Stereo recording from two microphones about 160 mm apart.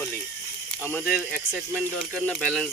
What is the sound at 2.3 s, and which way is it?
Speech, centre (ahead or behind).